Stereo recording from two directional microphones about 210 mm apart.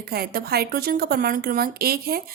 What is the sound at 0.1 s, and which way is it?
A woman's voice, 45° right (ahead or behind).